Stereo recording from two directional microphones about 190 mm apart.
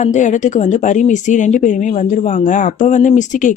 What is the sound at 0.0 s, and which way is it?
Speech, 40° left (ahead or behind).